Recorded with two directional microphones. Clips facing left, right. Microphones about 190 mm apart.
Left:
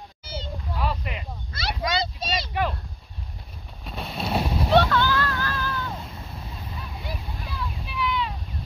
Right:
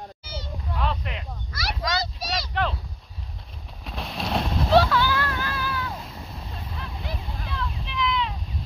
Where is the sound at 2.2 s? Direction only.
25° left (ahead or behind).